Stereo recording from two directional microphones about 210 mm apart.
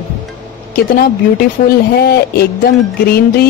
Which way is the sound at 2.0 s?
50° left (ahead or behind).